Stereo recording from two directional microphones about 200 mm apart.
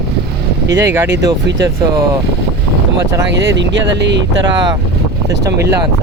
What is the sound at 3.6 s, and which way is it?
Speech, 60° right (ahead or behind).